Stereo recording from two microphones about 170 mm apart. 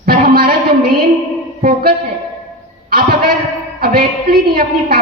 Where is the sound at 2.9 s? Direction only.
60° right (ahead or behind).